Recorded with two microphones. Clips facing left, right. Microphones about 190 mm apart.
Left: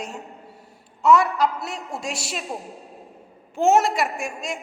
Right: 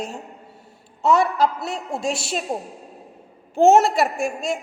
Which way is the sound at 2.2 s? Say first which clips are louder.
Right 5 dB; 30° right (ahead or behind).